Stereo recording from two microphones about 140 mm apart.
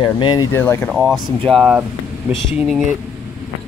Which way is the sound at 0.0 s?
30° left (ahead or behind).